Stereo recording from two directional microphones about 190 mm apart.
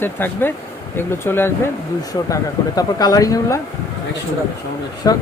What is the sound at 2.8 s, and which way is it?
Speech, 20° left (ahead or behind).